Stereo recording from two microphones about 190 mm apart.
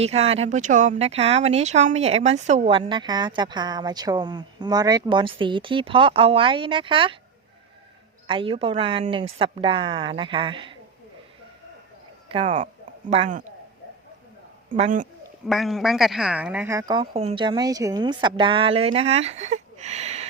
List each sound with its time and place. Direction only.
0.0 s speech: 35° right (ahead or behind)
8.3 s speech: 30° right (ahead or behind)
12.3 s speech: 30° right (ahead or behind)
14.7 s a man's voice: 45° right (ahead or behind)
15.4 s speech: centre (ahead or behind); by 20.2 s 35° right (ahead or behind)